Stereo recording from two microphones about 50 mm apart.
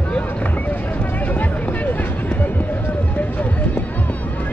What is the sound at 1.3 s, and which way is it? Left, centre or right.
Music, left.